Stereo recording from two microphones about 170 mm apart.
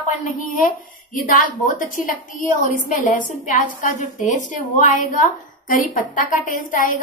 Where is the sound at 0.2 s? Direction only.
50° left (ahead or behind).